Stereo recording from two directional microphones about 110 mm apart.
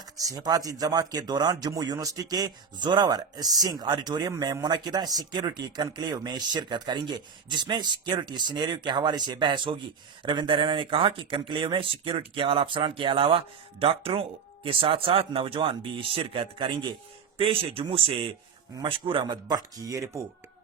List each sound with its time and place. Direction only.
0.0 s speech: 35° right (ahead or behind)
17.3 s speech: 55° right (ahead or behind); by 20.2 s 30° right (ahead or behind)